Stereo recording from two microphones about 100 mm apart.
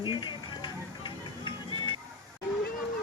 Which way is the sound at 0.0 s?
50° left (ahead or behind).